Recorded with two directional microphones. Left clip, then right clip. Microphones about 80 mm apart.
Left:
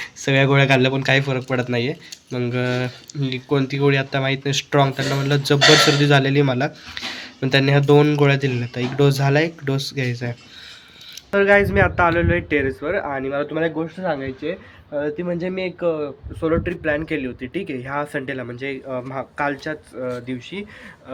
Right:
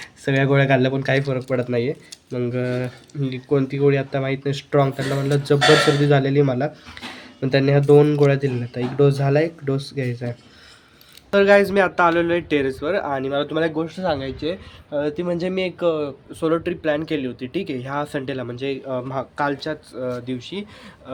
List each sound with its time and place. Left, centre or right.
0.0 s speech: centre
11.3 s speech: right
12.1 s speech: right